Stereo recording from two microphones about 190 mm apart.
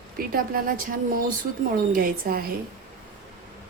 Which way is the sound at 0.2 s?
50° right (ahead or behind).